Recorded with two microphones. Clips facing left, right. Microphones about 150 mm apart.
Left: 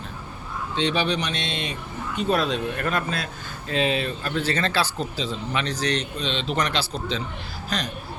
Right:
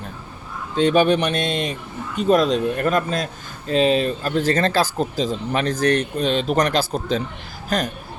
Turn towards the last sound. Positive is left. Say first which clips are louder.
# right 6 dB
turn(degrees=-50)  # may be behind; listen again after turning